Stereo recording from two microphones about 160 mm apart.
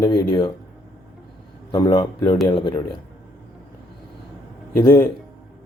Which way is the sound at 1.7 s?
25° left (ahead or behind).